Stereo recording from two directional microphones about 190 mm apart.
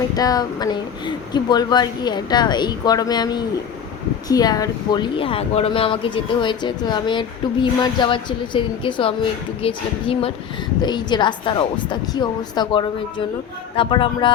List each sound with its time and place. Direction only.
0.2 s speech: 20° left (ahead or behind)